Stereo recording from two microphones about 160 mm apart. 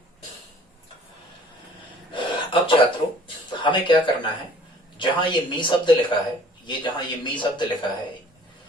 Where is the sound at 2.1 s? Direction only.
30° left (ahead or behind).